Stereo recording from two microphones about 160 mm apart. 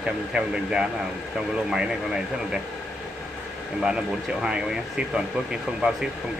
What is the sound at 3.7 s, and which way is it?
Speech, 5° right (ahead or behind).